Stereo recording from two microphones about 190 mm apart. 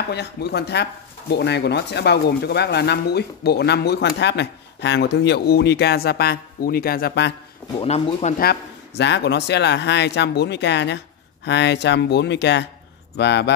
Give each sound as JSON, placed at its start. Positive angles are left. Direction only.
{"t": 0.1, "sound": "speech", "side_deg": 60}
{"t": 7.8, "sound": "speech", "side_deg": 35}
{"t": 8.4, "sound": "speech", "side_deg": 60}